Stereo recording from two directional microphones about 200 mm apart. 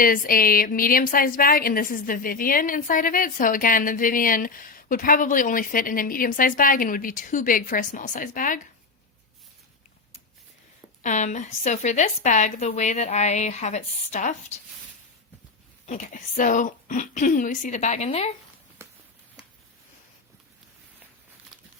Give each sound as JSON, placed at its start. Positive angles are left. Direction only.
{"t": 0.0, "sound": "a woman's voice", "side_deg": 45}
{"t": 11.0, "sound": "speech", "side_deg": 35}
{"t": 15.9, "sound": "speech", "side_deg": 40}